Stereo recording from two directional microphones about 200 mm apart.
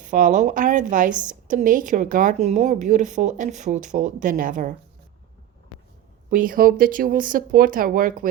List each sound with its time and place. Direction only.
0.0 s a woman's voice: 40° right (ahead or behind)
6.3 s speech: 45° right (ahead or behind)